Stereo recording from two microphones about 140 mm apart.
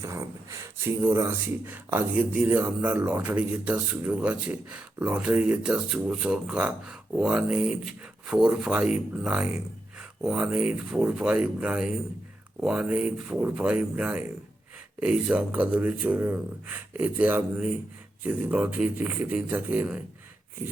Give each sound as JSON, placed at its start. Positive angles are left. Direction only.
{"t": 0.0, "sound": "speech", "side_deg": -20}